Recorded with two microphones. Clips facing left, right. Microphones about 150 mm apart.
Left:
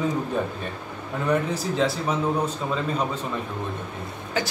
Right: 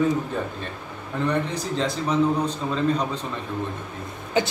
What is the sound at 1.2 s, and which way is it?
A man's voice, 5° left (ahead or behind).